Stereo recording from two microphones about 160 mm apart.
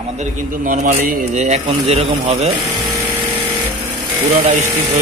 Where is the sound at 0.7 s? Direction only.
50° right (ahead or behind).